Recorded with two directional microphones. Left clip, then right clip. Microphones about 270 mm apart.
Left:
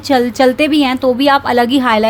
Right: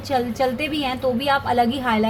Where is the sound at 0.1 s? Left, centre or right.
Left.